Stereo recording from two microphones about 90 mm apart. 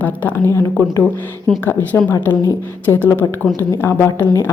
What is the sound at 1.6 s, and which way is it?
A woman's voice, 20° left (ahead or behind).